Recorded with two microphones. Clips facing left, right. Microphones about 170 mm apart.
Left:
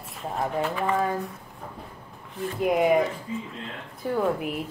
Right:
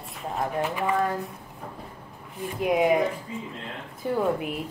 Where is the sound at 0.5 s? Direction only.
5° right (ahead or behind).